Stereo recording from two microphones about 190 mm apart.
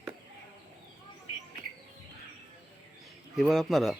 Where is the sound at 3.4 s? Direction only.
Centre (ahead or behind).